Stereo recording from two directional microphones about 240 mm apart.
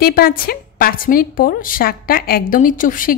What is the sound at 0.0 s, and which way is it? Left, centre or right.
A woman's voice, left.